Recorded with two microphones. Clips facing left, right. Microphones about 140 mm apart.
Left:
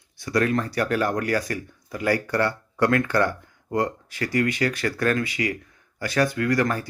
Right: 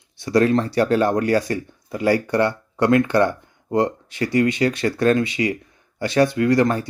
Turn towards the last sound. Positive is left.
turn(degrees=-25)  # may be behind; listen again after turning